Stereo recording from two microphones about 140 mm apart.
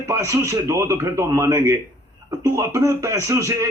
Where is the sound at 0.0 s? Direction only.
20° right (ahead or behind).